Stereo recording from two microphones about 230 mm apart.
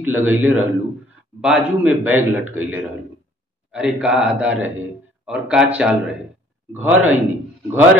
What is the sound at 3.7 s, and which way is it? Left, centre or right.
A man's voice, centre.